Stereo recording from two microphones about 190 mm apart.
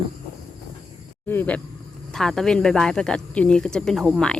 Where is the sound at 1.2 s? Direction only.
10° left (ahead or behind).